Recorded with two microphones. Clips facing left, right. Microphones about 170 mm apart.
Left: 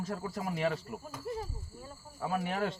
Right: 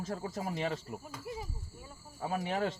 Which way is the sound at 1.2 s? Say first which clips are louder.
Left 6 dB; 10° right (ahead or behind).